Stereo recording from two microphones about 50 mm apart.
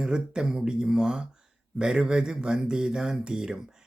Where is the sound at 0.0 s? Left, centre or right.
Centre.